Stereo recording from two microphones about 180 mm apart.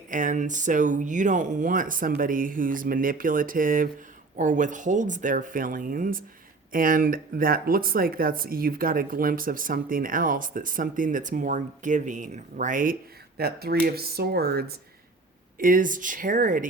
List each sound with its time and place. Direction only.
0.1 s speech: 45° right (ahead or behind)